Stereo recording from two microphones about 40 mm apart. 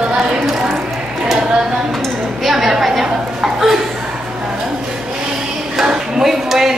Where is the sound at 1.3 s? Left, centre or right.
Centre.